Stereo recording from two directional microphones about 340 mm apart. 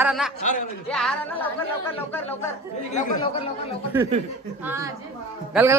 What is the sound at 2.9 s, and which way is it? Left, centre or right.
Speech, left.